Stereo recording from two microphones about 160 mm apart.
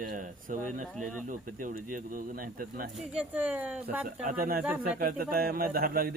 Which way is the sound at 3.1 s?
5° right (ahead or behind).